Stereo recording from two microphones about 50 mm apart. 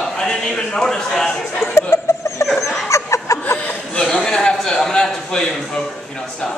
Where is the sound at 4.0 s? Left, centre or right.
Centre.